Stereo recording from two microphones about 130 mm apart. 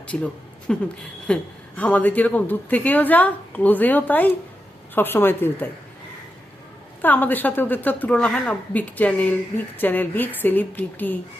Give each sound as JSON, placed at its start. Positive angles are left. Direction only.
{"t": 0.1, "sound": "a woman's voice", "side_deg": 5}
{"t": 7.0, "sound": "a woman's voice", "side_deg": 15}